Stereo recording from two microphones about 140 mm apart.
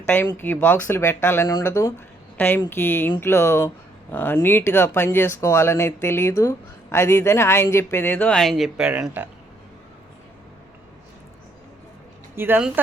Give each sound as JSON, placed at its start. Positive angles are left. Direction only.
{"t": 0.1, "sound": "speech", "side_deg": 15}
{"t": 12.4, "sound": "speech", "side_deg": -15}